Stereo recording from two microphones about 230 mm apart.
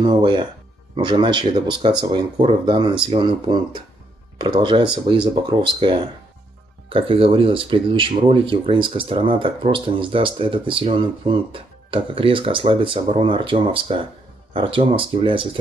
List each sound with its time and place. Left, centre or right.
0.0 s speech: right